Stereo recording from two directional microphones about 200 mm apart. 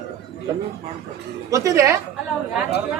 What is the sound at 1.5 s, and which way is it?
Speech, 15° right (ahead or behind).